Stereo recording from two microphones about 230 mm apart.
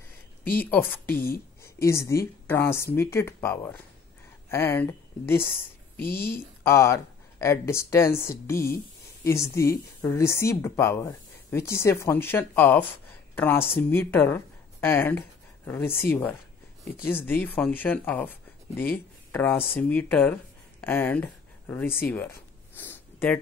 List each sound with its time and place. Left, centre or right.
0.6 s speech: centre
1.1 s speech: left
1.6 s speech: centre
5.9 s speech: left
6.6 s a woman's voice: centre
19.3 s speech: centre
22.8 s a sound: centre